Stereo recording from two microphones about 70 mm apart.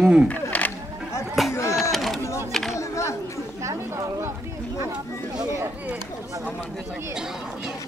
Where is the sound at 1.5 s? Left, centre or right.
Left.